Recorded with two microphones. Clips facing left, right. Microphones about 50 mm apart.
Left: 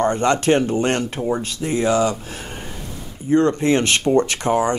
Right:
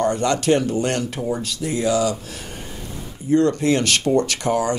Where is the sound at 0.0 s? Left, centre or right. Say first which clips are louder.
Left 2 dB; left.